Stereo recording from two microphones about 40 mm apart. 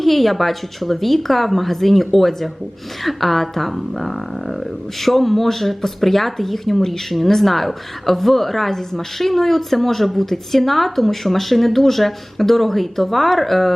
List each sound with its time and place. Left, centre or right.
0.0 s speech: centre